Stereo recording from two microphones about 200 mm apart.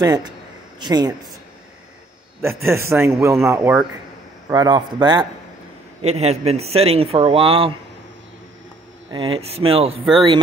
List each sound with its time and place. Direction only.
0.0 s speech: 20° right (ahead or behind)
2.8 s speech: 15° right (ahead or behind)
6.0 s speech: 30° right (ahead or behind)
9.1 s speech: 25° right (ahead or behind)